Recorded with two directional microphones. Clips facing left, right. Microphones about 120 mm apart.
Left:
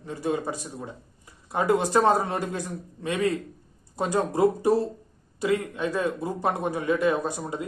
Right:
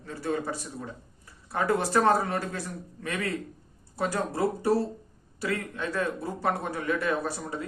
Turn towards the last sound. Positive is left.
turn(degrees=20)  # may be behind; listen again after turning